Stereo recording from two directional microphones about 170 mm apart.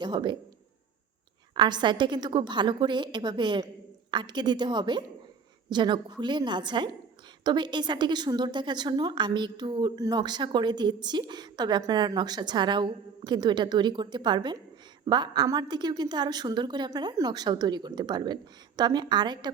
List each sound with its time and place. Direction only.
0.0 s a woman's voice: 25° right (ahead or behind)
1.5 s a woman's voice: 25° right (ahead or behind)